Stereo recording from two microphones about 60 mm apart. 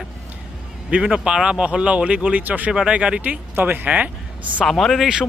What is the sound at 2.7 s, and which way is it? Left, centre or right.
Speech, centre.